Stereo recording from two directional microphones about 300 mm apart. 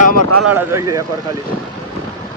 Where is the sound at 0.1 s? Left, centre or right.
Right.